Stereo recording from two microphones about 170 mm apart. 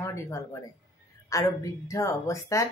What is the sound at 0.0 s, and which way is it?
A woman's voice, 15° left (ahead or behind).